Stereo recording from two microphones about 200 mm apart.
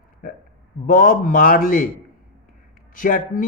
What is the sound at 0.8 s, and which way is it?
Speech, 45° left (ahead or behind).